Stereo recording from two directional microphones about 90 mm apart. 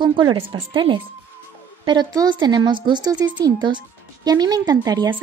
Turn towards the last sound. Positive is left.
turn(degrees=-45)  # may be behind; listen again after turning